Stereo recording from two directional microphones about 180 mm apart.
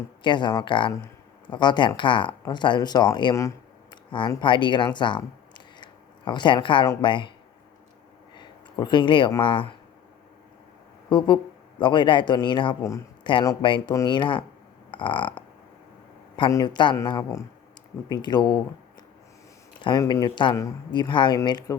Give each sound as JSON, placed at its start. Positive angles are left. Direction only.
{"t": 0.2, "sound": "speech", "side_deg": 25}
{"t": 4.9, "sound": "a sound", "side_deg": 25}
{"t": 7.0, "sound": "speech", "side_deg": 25}
{"t": 8.4, "sound": "speech", "side_deg": 25}
{"t": 11.8, "sound": "speech", "side_deg": 25}
{"t": 14.8, "sound": "a sound", "side_deg": 25}
{"t": 16.3, "sound": "speech", "side_deg": 20}
{"t": 19.8, "sound": "speech", "side_deg": 25}